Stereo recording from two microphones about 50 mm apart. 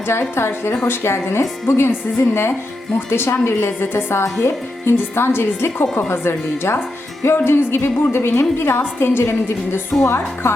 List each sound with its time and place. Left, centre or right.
0.3 s a woman's voice: left
1.9 s a woman's voice: left
4.2 s a woman's voice: left
10.0 s a woman's voice: left